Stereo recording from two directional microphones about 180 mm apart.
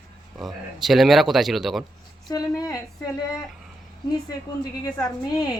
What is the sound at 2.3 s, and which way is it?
Speech, 20° left (ahead or behind).